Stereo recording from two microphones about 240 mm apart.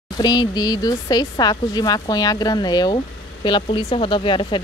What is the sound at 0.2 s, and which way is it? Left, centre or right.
Speech, centre.